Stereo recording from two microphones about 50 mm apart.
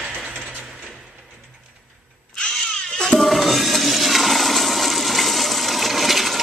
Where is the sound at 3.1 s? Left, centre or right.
Centre.